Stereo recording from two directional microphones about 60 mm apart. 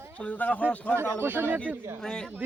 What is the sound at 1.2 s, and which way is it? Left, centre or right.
Speech, right.